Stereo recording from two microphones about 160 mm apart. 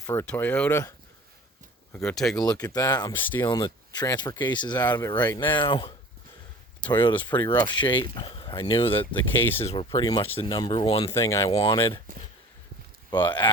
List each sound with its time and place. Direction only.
0.1 s speech: 15° left (ahead or behind)
1.9 s speech: 5° left (ahead or behind)
2.4 s speech: 25° left (ahead or behind)
9.1 s speech: 10° left (ahead or behind)
9.6 s speech: 30° left (ahead or behind)
11.1 s speech: 15° left (ahead or behind)
11.5 s speech: 35° left (ahead or behind)
13.2 s speech: 30° left (ahead or behind)